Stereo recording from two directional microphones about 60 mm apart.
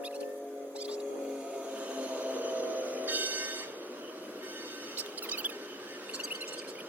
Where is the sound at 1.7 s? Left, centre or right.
Right.